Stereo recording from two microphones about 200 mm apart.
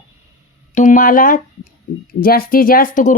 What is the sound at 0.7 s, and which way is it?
Speech, 40° left (ahead or behind).